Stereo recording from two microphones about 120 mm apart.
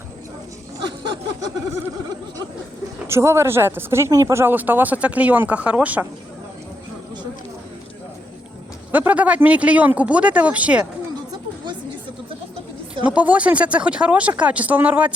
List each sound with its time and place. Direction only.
0.9 s a sound: 40° right (ahead or behind)
3.1 s speech: 20° right (ahead or behind)
8.9 s speech: 15° right (ahead or behind)
13.1 s speech: 10° right (ahead or behind)